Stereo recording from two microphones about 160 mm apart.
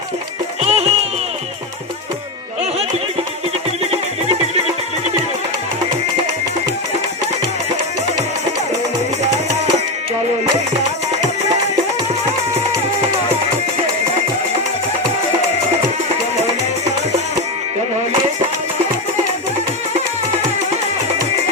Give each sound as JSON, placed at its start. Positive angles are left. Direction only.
{"t": 0.7, "sound": "music", "side_deg": -40}